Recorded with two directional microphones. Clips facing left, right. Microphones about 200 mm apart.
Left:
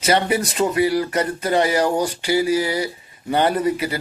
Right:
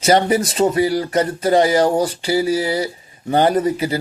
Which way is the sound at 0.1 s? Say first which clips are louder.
Right 4 dB; 35° right (ahead or behind).